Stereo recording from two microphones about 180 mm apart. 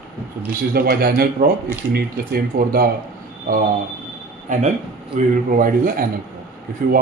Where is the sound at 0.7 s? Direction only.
60° right (ahead or behind).